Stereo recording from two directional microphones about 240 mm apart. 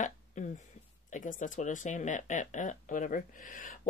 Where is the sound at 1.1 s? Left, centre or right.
Left.